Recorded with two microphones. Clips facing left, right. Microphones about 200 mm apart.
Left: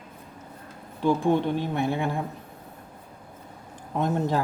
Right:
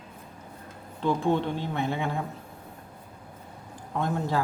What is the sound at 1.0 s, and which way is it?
Speech, 15° left (ahead or behind).